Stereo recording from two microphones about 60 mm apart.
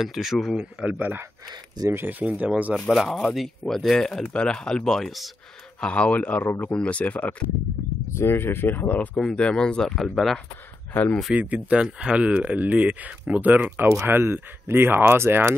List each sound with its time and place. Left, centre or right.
0.0 s speech: centre
0.8 s speech: right
2.9 s speech: centre
3.3 s speech: centre
5.8 s speech: left
8.1 s speech: left
9.1 s speech: centre
10.9 s speech: left
11.3 s speech: right
14.0 s speech: right